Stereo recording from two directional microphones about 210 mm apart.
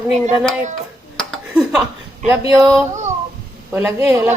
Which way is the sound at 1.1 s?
Centre (ahead or behind).